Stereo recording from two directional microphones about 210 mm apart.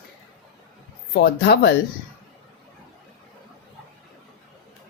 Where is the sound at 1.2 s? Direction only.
50° left (ahead or behind).